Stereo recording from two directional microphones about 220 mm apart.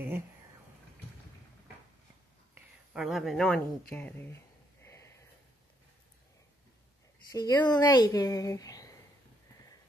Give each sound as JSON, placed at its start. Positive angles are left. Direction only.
{"t": 2.5, "sound": "speech", "side_deg": -5}
{"t": 4.8, "sound": "a sound", "side_deg": 10}
{"t": 7.3, "sound": "speech", "side_deg": 20}